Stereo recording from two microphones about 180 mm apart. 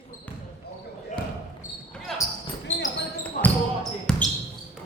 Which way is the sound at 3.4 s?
50° left (ahead or behind).